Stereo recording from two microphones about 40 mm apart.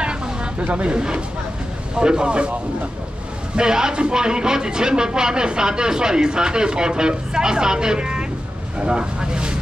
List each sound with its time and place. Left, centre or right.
0.0 s a sound: right
0.9 s speech: right
3.5 s speech: centre